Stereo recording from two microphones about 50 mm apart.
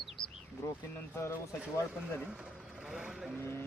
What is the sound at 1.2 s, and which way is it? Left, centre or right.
Speech, left.